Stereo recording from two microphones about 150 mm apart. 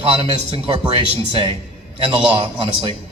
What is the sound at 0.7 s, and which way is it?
A man's voice, 35° right (ahead or behind).